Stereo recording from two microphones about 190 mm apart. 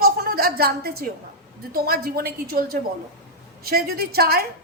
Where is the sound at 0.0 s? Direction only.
50° right (ahead or behind).